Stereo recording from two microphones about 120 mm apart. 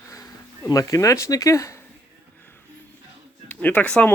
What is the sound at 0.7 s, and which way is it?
Speech, 30° left (ahead or behind).